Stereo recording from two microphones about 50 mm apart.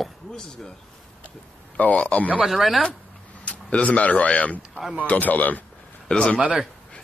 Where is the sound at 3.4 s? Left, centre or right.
Left.